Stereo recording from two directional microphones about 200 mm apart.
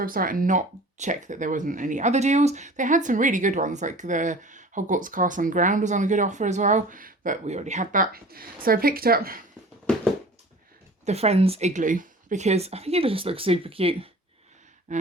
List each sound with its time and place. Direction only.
0.0 s speech: 45° right (ahead or behind)
11.0 s speech: 30° right (ahead or behind)
14.9 s gasp: 40° right (ahead or behind)